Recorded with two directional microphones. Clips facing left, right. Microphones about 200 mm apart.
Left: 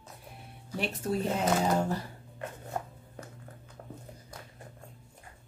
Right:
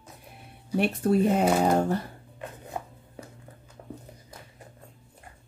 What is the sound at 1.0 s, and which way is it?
Speech, 60° right (ahead or behind).